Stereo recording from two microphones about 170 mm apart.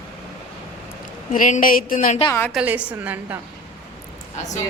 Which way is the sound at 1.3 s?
50° left (ahead or behind).